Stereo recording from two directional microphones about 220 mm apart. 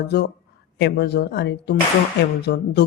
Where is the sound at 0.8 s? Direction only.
50° left (ahead or behind).